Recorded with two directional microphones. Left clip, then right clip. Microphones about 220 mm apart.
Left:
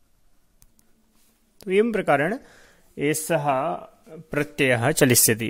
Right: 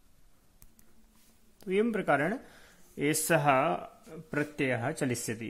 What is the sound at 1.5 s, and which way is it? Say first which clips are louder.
Speech: left 8 dB; 30° left (ahead or behind).